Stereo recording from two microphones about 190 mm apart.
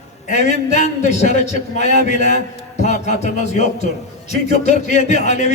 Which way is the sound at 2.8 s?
40° left (ahead or behind).